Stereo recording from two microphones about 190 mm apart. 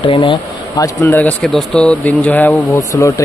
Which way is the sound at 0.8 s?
10° left (ahead or behind).